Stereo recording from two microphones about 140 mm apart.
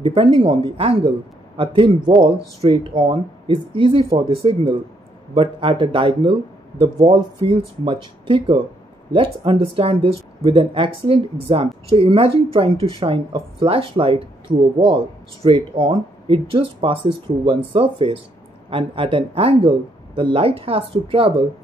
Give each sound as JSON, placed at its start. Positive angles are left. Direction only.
{"t": 0.0, "sound": "speech", "side_deg": -40}
{"t": 7.0, "sound": "speech", "side_deg": -50}